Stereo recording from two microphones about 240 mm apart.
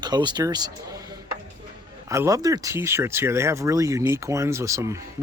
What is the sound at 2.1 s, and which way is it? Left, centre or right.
Speech, centre.